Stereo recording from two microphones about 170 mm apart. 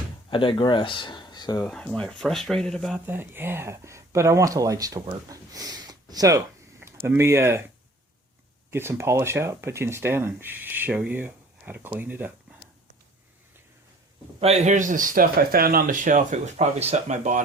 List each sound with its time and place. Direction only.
0.3 s speech: 30° left (ahead or behind)
1.6 s speech: 5° left (ahead or behind)
3.1 s speech: 10° right (ahead or behind)
8.7 s speech: 15° right (ahead or behind)
14.3 s speech: 40° right (ahead or behind)